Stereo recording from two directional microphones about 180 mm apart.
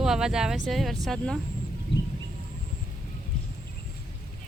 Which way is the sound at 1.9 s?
75° left (ahead or behind).